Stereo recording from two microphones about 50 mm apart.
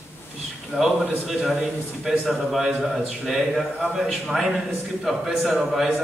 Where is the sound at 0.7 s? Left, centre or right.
Right.